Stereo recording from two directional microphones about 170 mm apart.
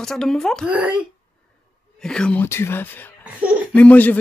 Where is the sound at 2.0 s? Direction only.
5° left (ahead or behind).